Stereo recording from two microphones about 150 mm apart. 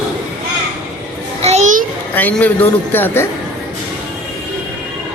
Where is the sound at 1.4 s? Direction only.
50° right (ahead or behind).